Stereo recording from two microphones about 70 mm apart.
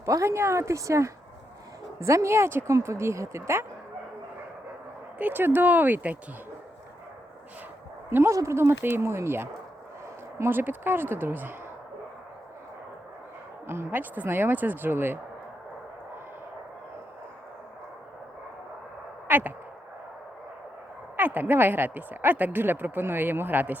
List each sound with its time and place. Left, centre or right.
0.0 s speech: right
5.1 s speech: right
8.3 s speech: right
10.6 s speech: right
13.7 s speech: right
19.3 s a sound: right
21.2 s speech: right